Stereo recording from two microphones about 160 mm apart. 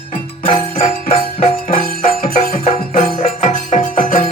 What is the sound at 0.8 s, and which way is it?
Music, 60° left (ahead or behind).